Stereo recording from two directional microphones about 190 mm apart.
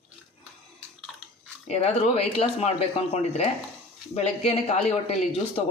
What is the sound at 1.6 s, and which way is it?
Speech, 35° left (ahead or behind).